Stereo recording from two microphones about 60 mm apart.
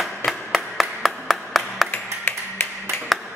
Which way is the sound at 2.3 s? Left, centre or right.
Left.